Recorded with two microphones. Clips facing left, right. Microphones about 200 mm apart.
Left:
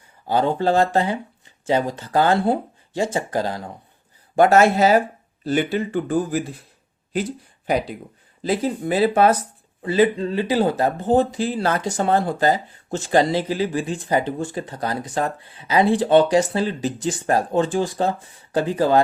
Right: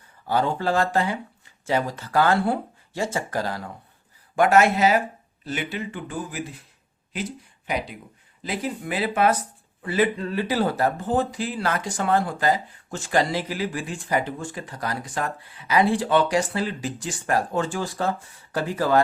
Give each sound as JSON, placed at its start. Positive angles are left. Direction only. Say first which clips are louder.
{"t": 0.4, "sound": "speech", "louder": "left 8 dB", "side_deg": 25}
{"t": 8.4, "sound": "speech", "louder": "left 7 dB", "side_deg": 30}